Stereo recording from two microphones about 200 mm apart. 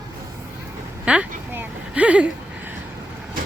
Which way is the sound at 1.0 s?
5° right (ahead or behind).